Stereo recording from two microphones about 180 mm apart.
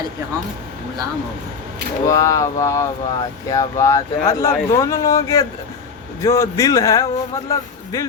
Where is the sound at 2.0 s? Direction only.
20° left (ahead or behind).